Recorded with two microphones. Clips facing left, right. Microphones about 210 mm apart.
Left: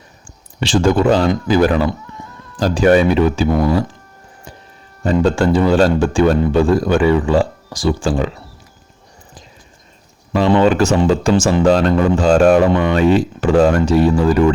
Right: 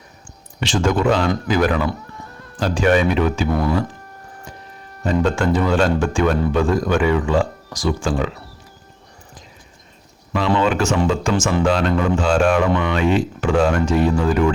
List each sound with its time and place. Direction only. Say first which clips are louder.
0.6 s a man's voice: left 5 dB; 30° left (ahead or behind)
5.0 s a man's voice: left 4 dB; 30° left (ahead or behind)
10.6 s a man's voice: left 5 dB; 35° left (ahead or behind)